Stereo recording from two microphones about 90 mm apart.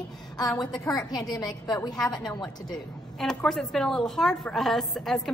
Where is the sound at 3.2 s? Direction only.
10° left (ahead or behind).